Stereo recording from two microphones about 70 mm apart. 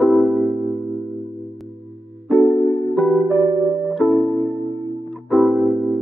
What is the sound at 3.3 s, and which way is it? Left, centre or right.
Music, right.